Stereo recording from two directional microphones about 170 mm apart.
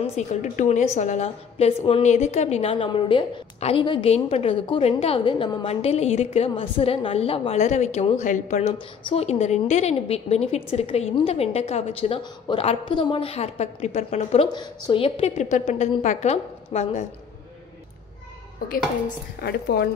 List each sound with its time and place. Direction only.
0.0 s a woman's voice: 45° left (ahead or behind)
19.4 s a woman's voice: 70° left (ahead or behind)